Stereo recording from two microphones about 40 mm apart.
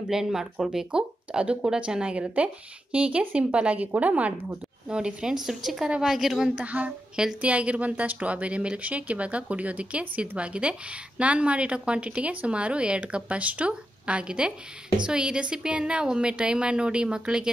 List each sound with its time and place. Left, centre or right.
0.1 s speech: centre; by 4.3 s right
4.8 s a woman's voice: centre
6.6 s speech: right